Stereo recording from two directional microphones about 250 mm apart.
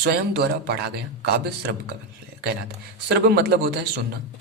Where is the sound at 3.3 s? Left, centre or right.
Right.